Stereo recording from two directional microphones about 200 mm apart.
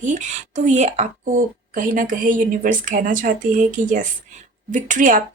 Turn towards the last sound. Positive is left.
turn(degrees=-40)  # may be behind; listen again after turning